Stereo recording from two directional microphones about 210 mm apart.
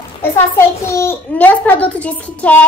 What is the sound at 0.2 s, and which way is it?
A child's voice, 10° left (ahead or behind).